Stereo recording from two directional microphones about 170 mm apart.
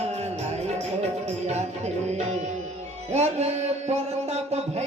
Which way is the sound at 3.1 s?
40° right (ahead or behind).